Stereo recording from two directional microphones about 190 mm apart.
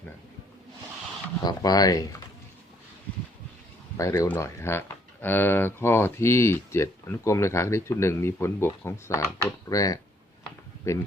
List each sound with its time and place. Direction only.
1.4 s speech: 20° left (ahead or behind)
3.9 s speech: 15° left (ahead or behind)